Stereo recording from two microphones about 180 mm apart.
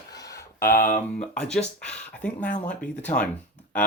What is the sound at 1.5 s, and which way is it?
Speech, 5° left (ahead or behind).